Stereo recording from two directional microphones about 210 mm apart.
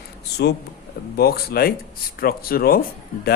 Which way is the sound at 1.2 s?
45° left (ahead or behind).